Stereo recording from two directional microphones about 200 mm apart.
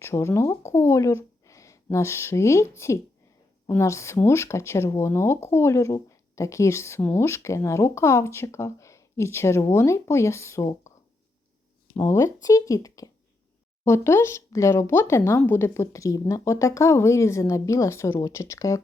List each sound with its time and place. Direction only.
0.0 s speech: 15° left (ahead or behind)
11.9 s speech: 15° left (ahead or behind)